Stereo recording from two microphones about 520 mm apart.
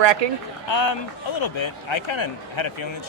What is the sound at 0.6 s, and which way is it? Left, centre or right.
Speech, left.